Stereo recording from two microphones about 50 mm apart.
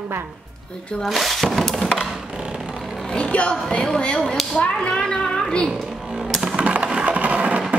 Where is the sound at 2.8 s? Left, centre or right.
Centre.